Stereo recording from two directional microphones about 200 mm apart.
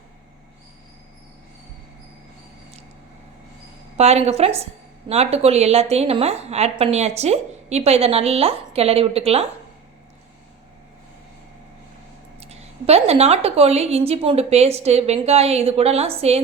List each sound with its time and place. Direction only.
3.9 s a woman's voice: 30° right (ahead or behind)
12.4 s a woman's voice: 30° right (ahead or behind)